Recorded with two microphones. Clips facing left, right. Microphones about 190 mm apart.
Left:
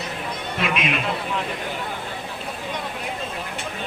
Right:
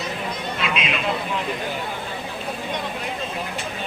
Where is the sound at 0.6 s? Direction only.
50° left (ahead or behind).